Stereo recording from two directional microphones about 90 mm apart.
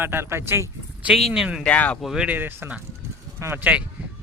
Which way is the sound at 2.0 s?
5° right (ahead or behind).